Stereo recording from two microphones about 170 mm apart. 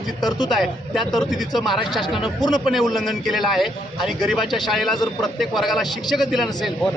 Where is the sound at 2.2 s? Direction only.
25° left (ahead or behind).